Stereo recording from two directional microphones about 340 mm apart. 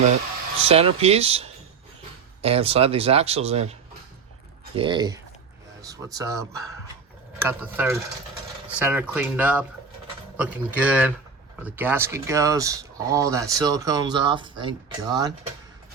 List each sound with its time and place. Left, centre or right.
0.6 s speech: centre